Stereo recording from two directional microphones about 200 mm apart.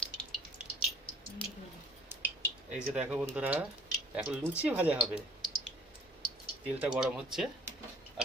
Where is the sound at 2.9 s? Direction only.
5° right (ahead or behind).